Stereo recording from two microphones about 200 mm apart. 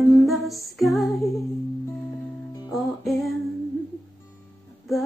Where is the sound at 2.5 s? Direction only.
20° left (ahead or behind).